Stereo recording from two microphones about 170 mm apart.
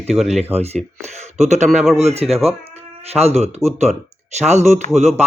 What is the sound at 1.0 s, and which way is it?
Speech, 40° right (ahead or behind).